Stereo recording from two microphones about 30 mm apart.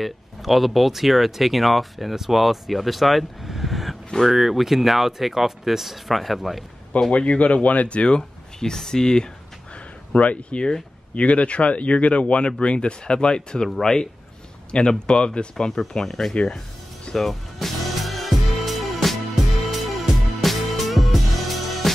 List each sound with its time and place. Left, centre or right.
0.0 s speech: centre
3.5 s a sound: centre
4.3 s speech: centre
7.1 s speech: left
8.2 s speech: centre
10.1 s speech: left
10.6 s speech: left
11.2 s speech: left
13.7 s speech: centre
14.7 s speech: left
15.5 s speech: centre
16.1 s speech: centre
17.1 s music: centre